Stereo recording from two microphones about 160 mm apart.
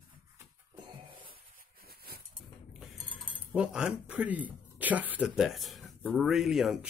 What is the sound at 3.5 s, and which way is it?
Speech, 5° right (ahead or behind).